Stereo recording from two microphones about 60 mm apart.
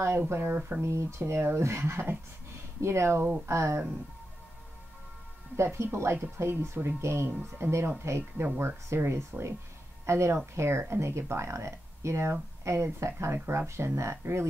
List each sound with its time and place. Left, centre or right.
0.3 s speech: right
0.8 s speech: right
2.8 s speech: right
5.6 s speech: right
7.2 s speech: right
8.0 s a woman's voice: right